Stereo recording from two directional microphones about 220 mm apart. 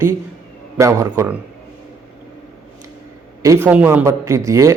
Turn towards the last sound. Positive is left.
turn(degrees=-15)  # may be behind; listen again after turning